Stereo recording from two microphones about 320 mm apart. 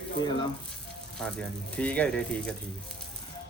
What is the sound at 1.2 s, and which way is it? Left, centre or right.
A man's voice, centre.